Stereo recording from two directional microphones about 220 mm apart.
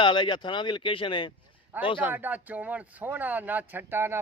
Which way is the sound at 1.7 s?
10° right (ahead or behind).